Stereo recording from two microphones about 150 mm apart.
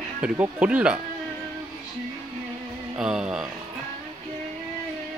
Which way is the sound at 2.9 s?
5° right (ahead or behind).